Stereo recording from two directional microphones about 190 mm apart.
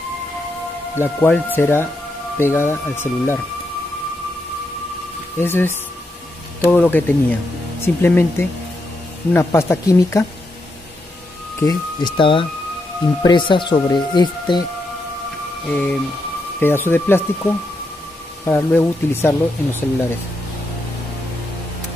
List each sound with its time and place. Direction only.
0.9 s speech: 10° left (ahead or behind)
5.4 s speech: 10° left (ahead or behind)
9.3 s speech: 15° left (ahead or behind)
11.6 s speech: 25° left (ahead or behind)
15.7 s speech: 5° left (ahead or behind)